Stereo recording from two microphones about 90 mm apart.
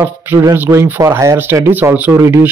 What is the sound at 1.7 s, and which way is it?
Speech, 20° right (ahead or behind).